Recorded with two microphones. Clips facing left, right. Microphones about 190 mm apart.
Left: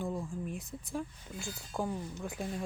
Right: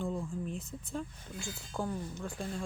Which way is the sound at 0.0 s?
15° left (ahead or behind).